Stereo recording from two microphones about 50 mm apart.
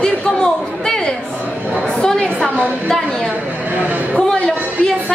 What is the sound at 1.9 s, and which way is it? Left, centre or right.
Chatter, centre.